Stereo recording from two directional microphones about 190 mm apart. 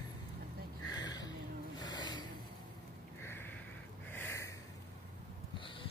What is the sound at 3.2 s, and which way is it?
Snort, 10° left (ahead or behind).